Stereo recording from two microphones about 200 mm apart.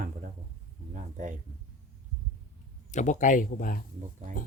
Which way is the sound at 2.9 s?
40° left (ahead or behind).